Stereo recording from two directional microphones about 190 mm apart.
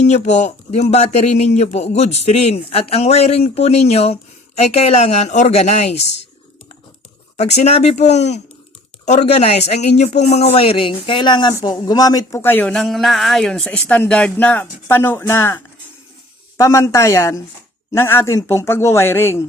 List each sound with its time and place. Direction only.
0.0 s a man's voice: 35° left (ahead or behind)
7.3 s a man's voice: 35° left (ahead or behind); by 19.5 s 10° left (ahead or behind)